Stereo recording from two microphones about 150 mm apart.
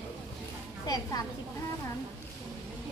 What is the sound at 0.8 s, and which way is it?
Speech, 25° left (ahead or behind).